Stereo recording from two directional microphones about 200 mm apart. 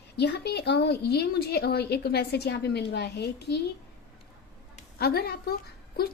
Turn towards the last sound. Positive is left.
turn(degrees=50)  # may be behind; listen again after turning